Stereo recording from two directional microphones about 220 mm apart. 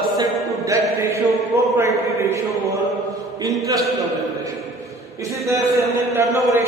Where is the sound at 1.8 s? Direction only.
10° right (ahead or behind).